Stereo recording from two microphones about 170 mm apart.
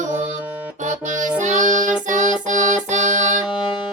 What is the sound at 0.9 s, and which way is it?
Music, 45° right (ahead or behind).